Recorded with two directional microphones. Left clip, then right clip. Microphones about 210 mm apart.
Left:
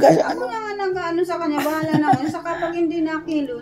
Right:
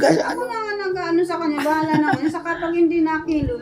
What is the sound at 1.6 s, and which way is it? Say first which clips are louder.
Speech: right 3 dB; 20° left (ahead or behind).